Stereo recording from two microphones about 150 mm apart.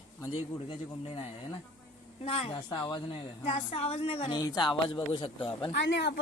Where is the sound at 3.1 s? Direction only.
45° left (ahead or behind).